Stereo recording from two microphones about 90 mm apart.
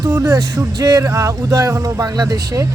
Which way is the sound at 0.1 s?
40° right (ahead or behind).